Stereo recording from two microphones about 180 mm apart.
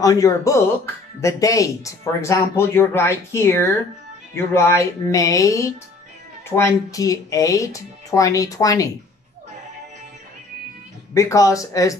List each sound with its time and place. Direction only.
0.0 s speech: 20° left (ahead or behind)
11.1 s speech: 20° left (ahead or behind)